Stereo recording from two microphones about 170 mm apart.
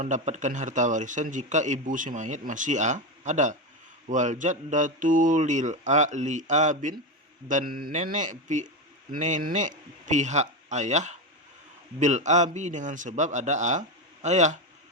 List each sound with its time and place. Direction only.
0.0 s a man's voice: 45° right (ahead or behind)